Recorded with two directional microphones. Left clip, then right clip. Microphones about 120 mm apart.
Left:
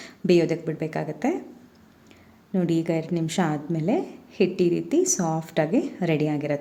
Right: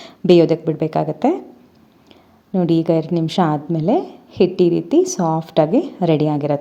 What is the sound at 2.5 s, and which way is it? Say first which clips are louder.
A woman's voice: right 8 dB; 35° right (ahead or behind).